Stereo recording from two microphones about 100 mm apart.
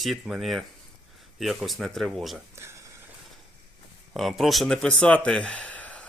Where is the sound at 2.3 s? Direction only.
25° right (ahead or behind).